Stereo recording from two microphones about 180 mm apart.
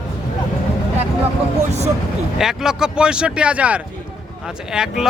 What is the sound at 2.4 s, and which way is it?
Speech, centre (ahead or behind).